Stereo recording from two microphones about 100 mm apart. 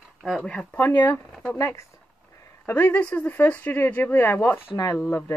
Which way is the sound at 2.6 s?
20° left (ahead or behind).